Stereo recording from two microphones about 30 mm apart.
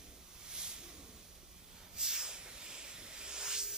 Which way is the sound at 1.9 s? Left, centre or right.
Right.